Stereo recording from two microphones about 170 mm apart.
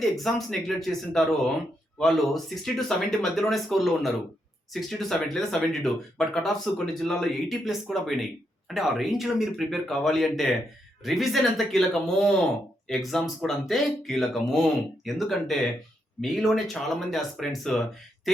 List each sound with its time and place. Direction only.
0.0 s speech: centre (ahead or behind)